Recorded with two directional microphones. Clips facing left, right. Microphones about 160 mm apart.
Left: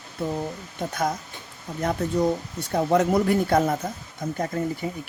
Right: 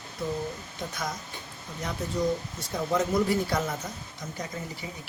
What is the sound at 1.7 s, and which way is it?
Speech, 55° left (ahead or behind).